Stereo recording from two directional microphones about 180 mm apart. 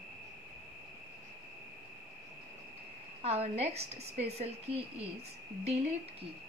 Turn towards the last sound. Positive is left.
turn(degrees=-35)  # may be behind; listen again after turning